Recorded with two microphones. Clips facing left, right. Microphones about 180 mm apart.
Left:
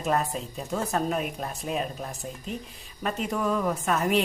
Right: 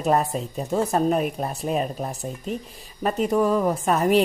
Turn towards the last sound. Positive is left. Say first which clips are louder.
# right 5 dB
turn(degrees=-35)  # may be behind; listen again after turning